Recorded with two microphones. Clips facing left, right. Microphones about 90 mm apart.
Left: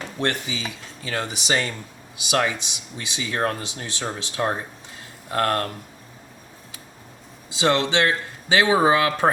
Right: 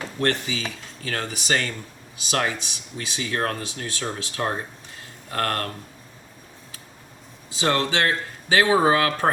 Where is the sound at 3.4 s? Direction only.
25° left (ahead or behind).